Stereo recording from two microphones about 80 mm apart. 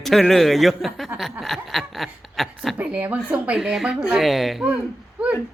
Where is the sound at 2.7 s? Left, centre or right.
Centre.